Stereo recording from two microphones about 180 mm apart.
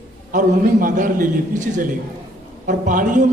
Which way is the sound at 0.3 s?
50° right (ahead or behind).